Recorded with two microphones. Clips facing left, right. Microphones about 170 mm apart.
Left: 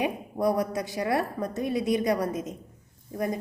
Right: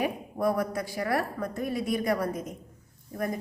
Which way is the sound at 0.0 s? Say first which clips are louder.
Left 1 dB; 20° left (ahead or behind).